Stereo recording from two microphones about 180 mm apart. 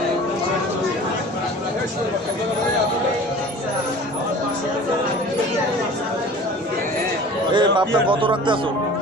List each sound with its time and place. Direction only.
7.5 s speech: 25° right (ahead or behind)